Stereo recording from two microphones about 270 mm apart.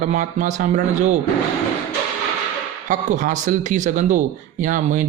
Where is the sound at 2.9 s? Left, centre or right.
Right.